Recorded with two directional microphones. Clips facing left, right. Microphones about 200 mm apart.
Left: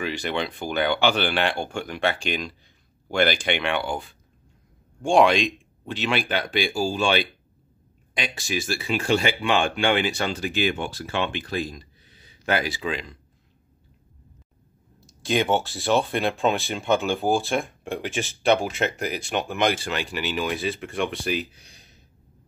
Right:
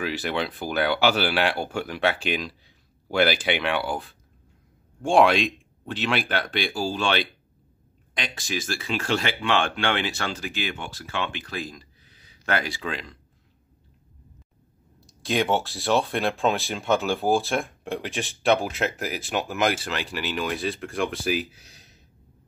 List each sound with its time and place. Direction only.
0.0 s speech: 5° right (ahead or behind)
8.2 s speech: 5° left (ahead or behind)
11.1 s speech: 25° left (ahead or behind)
12.4 s speech: 5° left (ahead or behind)
15.0 s speech: centre (ahead or behind)